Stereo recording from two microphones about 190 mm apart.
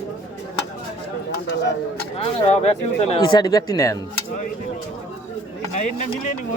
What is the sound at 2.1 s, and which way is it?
Speech, 30° left (ahead or behind).